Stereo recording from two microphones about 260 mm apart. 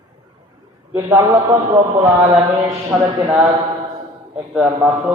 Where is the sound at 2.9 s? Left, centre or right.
Centre.